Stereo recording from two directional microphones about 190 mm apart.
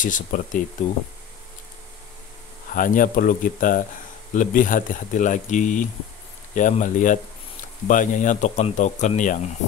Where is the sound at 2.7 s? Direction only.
45° left (ahead or behind).